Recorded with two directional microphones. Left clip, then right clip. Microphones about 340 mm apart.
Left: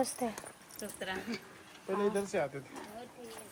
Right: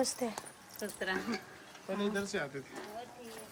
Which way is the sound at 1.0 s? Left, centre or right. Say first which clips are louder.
Right 3 dB; right.